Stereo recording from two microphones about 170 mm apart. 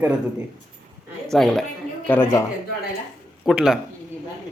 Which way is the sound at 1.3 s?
5° left (ahead or behind).